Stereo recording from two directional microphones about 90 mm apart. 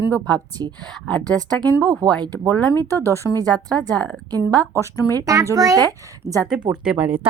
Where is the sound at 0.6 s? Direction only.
55° right (ahead or behind).